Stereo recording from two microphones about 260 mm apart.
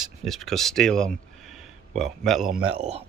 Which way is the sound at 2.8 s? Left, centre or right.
Right.